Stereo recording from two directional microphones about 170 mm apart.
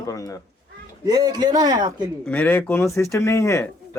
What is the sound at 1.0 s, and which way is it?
Speech, 20° right (ahead or behind).